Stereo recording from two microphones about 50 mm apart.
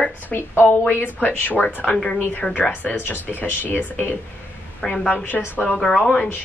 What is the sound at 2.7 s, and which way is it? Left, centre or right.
Speech, left.